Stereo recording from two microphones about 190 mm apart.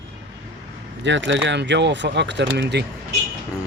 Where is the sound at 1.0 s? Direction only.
70° right (ahead or behind).